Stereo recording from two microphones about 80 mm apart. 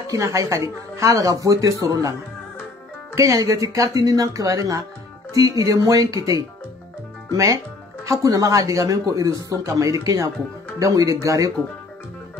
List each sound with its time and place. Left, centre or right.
0.1 s speech: right
3.2 s speech: right